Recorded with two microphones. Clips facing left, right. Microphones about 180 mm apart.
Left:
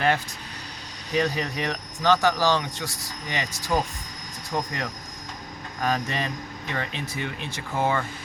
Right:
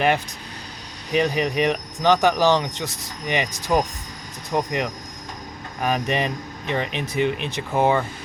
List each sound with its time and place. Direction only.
1.1 s speech: 20° right (ahead or behind)